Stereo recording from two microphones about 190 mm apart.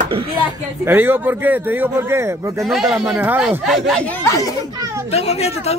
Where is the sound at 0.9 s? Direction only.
10° right (ahead or behind).